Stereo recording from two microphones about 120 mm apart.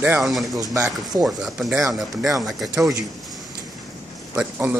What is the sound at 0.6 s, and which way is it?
Speech, 30° right (ahead or behind).